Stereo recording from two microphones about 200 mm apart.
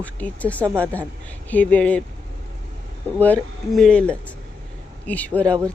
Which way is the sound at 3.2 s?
5° left (ahead or behind).